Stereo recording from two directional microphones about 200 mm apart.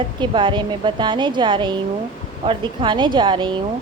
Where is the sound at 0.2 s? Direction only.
25° right (ahead or behind).